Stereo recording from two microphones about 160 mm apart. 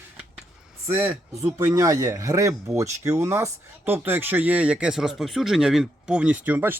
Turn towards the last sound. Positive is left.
turn(degrees=-10)  # may be behind; listen again after turning